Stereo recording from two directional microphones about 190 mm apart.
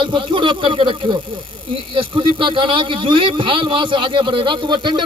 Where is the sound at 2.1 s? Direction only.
25° right (ahead or behind).